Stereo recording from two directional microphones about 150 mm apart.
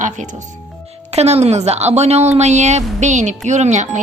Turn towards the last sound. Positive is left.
turn(degrees=-50)  # may be behind; listen again after turning